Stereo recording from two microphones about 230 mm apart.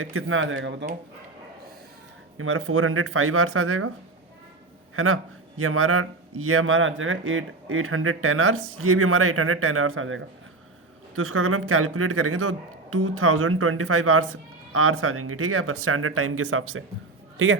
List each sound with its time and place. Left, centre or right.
0.0 s speech: right
2.4 s speech: right
4.9 s a man's voice: right